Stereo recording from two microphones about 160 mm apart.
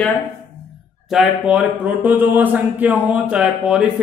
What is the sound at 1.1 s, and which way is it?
Speech, centre (ahead or behind).